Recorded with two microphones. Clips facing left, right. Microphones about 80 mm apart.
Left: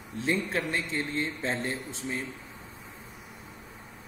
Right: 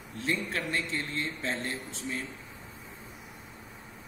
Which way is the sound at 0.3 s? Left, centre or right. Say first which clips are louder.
Left 3 dB; centre.